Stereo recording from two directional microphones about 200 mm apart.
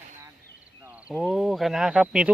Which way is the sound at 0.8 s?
10° right (ahead or behind).